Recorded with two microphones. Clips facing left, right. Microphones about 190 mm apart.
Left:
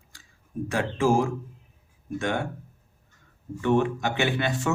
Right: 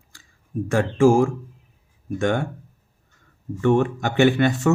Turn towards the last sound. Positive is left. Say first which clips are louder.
# right 9 dB
turn(degrees=-50)  # may be behind; listen again after turning